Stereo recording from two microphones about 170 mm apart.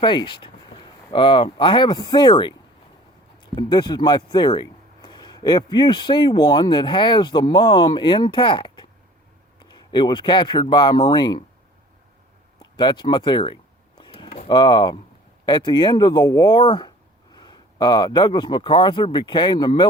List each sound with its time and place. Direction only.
0.0 s speech: 30° left (ahead or behind)
12.7 s speech: 25° left (ahead or behind)
14.0 s a sound: 30° left (ahead or behind)
15.4 s speech: 25° left (ahead or behind)